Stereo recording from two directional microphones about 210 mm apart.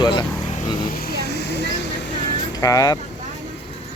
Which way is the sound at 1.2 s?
50° left (ahead or behind).